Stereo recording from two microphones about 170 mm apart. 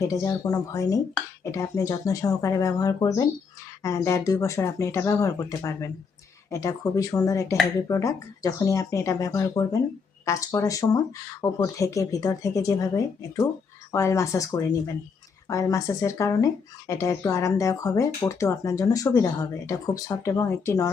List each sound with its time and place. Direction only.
0.0 s speech: 20° left (ahead or behind)